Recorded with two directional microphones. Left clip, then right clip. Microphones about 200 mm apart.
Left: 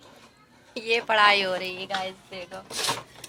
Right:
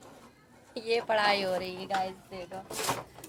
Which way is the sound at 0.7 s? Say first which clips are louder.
Left 5 dB; 15° left (ahead or behind).